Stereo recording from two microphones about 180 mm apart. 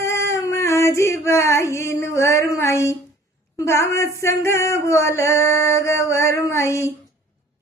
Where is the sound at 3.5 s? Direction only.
15° left (ahead or behind).